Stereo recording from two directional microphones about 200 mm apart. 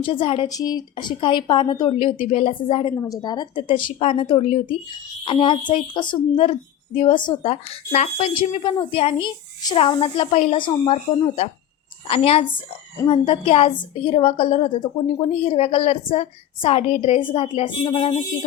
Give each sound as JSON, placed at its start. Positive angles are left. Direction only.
{"t": 0.0, "sound": "speech", "side_deg": 25}
{"t": 2.9, "sound": "a woman's voice", "side_deg": 15}